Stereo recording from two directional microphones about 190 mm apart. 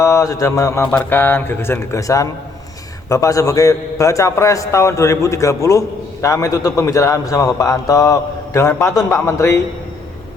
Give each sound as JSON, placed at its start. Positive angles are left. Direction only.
{"t": 0.0, "sound": "a man's voice", "side_deg": 15}